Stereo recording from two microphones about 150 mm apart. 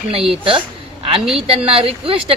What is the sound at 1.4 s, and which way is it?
Speech, 40° right (ahead or behind).